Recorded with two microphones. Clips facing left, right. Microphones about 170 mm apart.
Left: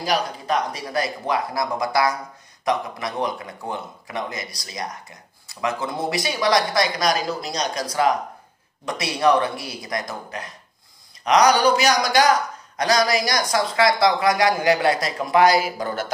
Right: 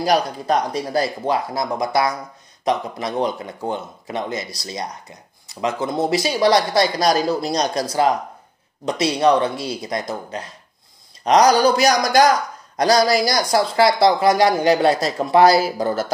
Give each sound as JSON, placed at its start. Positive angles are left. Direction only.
{"t": 0.0, "sound": "a man's voice", "side_deg": -35}